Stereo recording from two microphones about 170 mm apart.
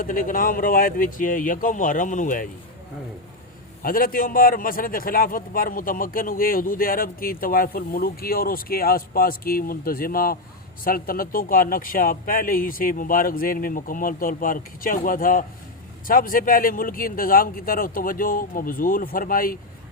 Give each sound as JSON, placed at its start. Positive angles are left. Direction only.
{"t": 0.0, "sound": "speech", "side_deg": 55}
{"t": 3.8, "sound": "a man's voice", "side_deg": 55}